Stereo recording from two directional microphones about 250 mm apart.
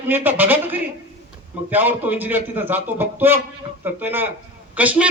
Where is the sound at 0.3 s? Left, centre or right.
Centre.